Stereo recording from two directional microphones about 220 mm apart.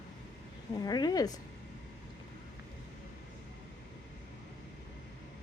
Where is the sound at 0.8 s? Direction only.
20° left (ahead or behind).